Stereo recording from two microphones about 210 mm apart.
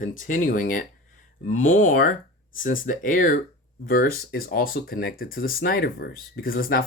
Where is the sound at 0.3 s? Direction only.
40° left (ahead or behind).